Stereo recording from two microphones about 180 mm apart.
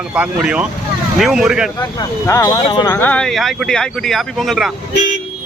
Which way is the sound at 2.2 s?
15° left (ahead or behind).